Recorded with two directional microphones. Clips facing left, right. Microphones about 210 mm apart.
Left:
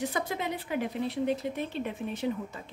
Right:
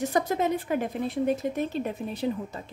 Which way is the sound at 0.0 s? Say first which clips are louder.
Right 6 dB; 45° right (ahead or behind).